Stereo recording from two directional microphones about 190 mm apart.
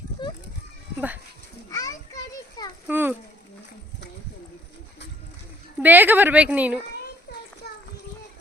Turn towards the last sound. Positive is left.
turn(degrees=55)  # may be behind; listen again after turning